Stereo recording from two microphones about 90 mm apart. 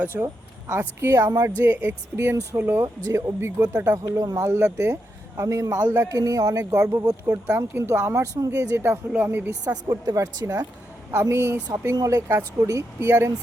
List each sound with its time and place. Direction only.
0.0 s speech: 25° right (ahead or behind)
2.8 s speech: 35° right (ahead or behind)
3.6 s speech: 20° right (ahead or behind)
3.9 s speech: 35° right (ahead or behind); by 9.5 s 20° right (ahead or behind)
9.6 s speech: 45° right (ahead or behind)
11.1 s speech: 30° right (ahead or behind)